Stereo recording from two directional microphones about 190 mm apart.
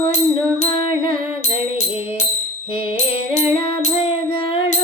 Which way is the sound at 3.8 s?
35° left (ahead or behind).